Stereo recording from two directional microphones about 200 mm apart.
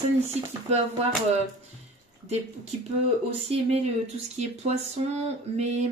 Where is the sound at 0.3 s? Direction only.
30° right (ahead or behind).